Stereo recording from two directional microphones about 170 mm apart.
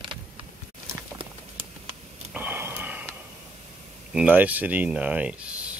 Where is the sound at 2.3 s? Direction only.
10° right (ahead or behind).